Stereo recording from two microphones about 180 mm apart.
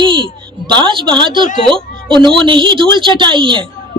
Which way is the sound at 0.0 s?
25° right (ahead or behind).